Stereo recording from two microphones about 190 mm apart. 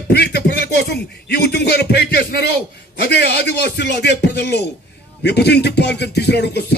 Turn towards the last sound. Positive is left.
turn(degrees=60)  # may be behind; listen again after turning